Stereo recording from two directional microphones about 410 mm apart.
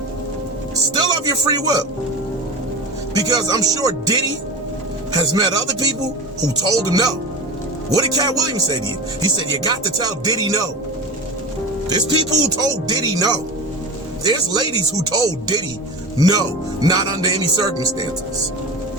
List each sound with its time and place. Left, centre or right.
0.9 s speech: centre
3.2 s speech: centre
11.9 s speech: centre
15.1 s speech: centre